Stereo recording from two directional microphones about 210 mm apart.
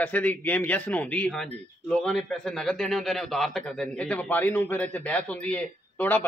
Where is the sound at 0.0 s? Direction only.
5° left (ahead or behind).